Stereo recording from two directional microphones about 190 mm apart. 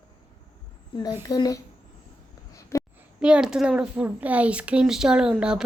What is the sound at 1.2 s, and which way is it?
Speech, 20° left (ahead or behind).